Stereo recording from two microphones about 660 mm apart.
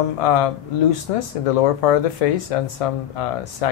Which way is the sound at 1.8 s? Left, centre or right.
Left.